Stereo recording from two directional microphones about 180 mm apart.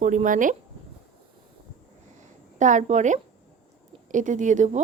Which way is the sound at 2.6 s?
45° right (ahead or behind).